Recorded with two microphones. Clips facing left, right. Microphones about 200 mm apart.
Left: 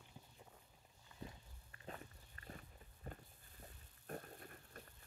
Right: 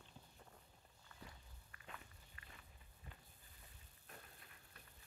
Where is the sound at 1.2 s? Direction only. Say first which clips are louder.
Left 7 dB; 35° left (ahead or behind).